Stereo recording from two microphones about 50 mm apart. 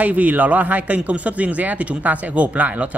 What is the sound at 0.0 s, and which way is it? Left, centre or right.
A man's voice, right.